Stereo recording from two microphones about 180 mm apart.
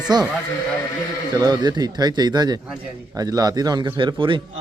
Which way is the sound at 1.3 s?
20° right (ahead or behind).